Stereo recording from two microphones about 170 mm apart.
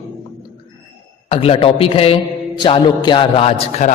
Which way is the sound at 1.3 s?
35° left (ahead or behind).